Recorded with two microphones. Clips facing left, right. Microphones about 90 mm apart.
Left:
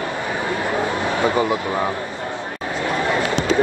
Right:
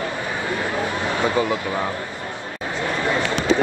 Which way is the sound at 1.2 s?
20° left (ahead or behind).